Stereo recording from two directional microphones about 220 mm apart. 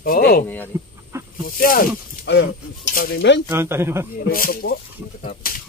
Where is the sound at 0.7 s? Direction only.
10° right (ahead or behind).